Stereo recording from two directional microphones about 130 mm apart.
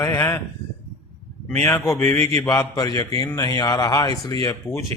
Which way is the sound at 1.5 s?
20° left (ahead or behind).